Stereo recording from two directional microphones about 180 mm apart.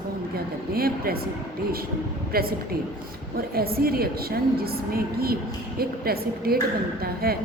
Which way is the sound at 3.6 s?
55° right (ahead or behind).